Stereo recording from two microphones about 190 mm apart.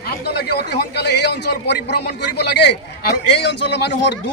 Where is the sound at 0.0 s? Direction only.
55° left (ahead or behind).